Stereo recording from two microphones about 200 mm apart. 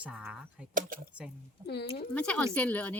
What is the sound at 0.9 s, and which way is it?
Speech, 45° right (ahead or behind).